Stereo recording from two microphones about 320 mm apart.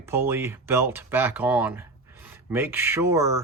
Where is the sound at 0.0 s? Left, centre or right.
Centre.